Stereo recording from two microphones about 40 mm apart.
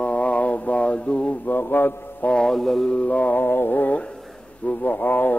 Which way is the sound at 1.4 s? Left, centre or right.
Left.